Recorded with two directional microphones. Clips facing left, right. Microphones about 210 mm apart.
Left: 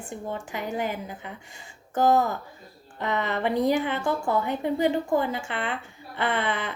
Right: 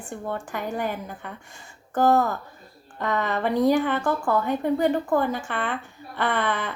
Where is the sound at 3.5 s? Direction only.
15° left (ahead or behind).